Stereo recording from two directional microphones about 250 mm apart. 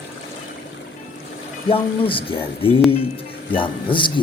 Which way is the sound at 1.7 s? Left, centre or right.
Left.